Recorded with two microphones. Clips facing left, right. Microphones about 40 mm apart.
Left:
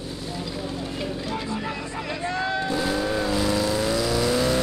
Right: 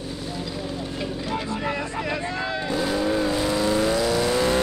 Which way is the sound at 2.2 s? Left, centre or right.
Centre.